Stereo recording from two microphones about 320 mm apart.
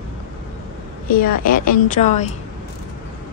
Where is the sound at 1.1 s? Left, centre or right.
Left.